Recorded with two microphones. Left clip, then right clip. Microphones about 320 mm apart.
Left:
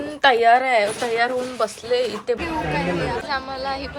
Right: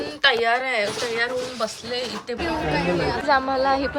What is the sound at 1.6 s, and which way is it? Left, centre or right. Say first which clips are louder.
Speech: left 5 dB; centre.